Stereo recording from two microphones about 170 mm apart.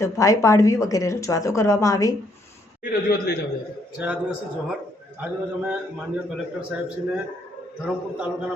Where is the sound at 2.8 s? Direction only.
65° left (ahead or behind).